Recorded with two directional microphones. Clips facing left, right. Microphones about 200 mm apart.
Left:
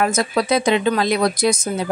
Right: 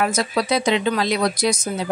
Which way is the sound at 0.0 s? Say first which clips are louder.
Left 2 dB; 50° left (ahead or behind).